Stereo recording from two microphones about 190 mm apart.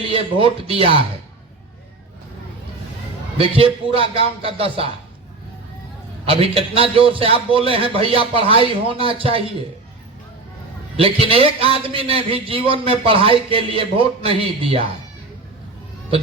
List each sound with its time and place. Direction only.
0.0 s a man's voice: 30° right (ahead or behind)
3.3 s a man's voice: 30° right (ahead or behind)
6.2 s a man's voice: 30° right (ahead or behind)
10.9 s a man's voice: 30° right (ahead or behind)